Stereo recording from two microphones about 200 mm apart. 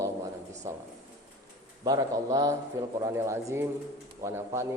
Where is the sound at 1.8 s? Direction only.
20° right (ahead or behind).